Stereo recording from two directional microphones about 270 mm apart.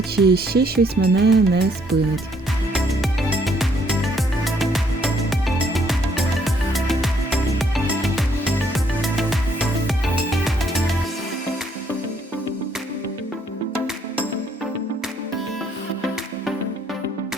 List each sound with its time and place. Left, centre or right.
0.3 s speech: right
2.7 s music: centre